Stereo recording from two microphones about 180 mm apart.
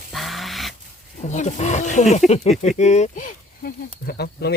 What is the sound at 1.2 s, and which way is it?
Speech, 40° left (ahead or behind).